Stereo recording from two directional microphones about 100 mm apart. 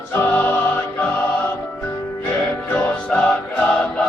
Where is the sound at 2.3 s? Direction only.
15° left (ahead or behind).